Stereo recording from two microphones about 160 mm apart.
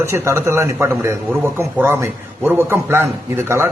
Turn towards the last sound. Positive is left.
turn(degrees=-15)  # may be behind; listen again after turning